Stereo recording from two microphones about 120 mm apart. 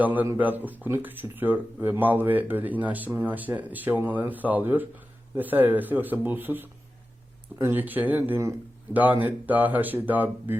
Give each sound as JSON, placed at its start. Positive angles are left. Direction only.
{"t": 0.0, "sound": "speech", "side_deg": -15}